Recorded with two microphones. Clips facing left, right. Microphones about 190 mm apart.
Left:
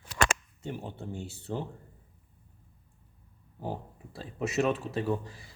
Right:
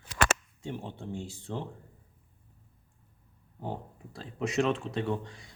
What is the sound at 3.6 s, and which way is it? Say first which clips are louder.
Speech: left 1 dB; 5° left (ahead or behind).